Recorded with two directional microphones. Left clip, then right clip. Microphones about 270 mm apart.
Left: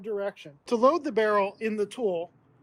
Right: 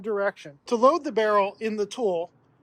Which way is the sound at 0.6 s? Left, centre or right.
Centre.